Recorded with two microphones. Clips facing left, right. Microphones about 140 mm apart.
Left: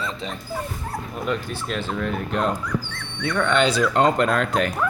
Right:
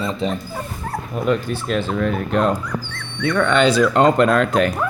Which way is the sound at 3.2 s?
90° right.